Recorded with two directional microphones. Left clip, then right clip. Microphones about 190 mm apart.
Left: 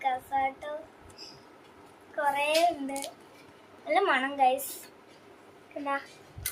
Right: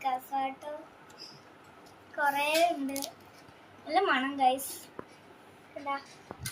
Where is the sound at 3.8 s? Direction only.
25° left (ahead or behind).